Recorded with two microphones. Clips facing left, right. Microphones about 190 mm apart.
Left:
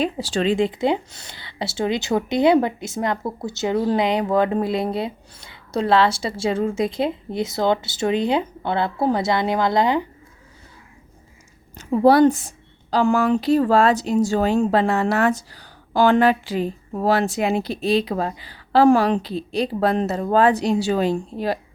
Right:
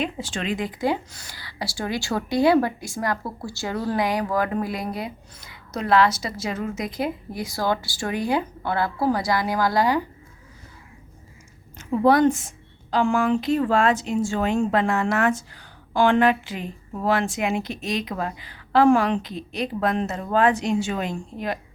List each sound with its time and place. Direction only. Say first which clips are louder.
0.0 s speech: left 6 dB; 35° left (ahead or behind)
11.8 s a woman's voice: left 4 dB; 35° left (ahead or behind)